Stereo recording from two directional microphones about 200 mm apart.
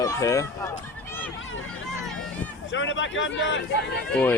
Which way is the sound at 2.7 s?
70° left (ahead or behind).